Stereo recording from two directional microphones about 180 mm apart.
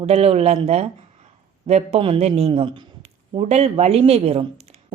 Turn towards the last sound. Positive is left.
turn(degrees=-35)  # may be behind; listen again after turning